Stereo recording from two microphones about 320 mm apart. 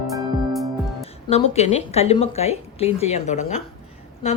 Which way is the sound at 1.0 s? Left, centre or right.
Centre.